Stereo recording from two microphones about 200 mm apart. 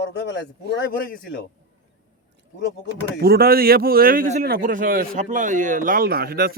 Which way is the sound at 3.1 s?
50° right (ahead or behind).